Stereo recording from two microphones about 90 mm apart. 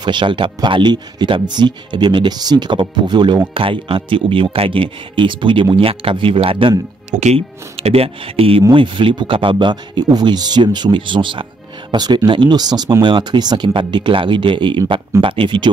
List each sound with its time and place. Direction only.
0.0 s speech: 60° right (ahead or behind)
3.5 s speech: 85° right
8.7 s speech: 75° right (ahead or behind)
11.9 s speech: 55° right (ahead or behind)
13.0 s speech: 60° right (ahead or behind)